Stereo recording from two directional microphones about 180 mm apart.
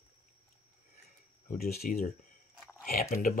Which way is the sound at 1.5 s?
55° left (ahead or behind).